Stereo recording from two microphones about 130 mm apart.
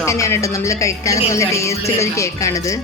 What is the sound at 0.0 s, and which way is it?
Speech, 25° left (ahead or behind).